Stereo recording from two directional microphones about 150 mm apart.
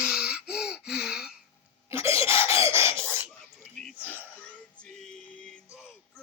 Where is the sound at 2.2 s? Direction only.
35° left (ahead or behind).